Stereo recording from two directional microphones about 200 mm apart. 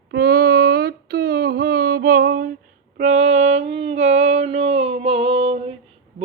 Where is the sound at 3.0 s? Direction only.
35° right (ahead or behind).